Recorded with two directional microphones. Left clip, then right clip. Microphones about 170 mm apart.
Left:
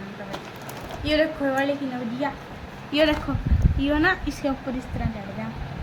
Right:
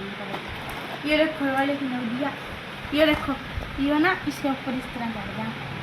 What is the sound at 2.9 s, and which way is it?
Speech, 10° right (ahead or behind).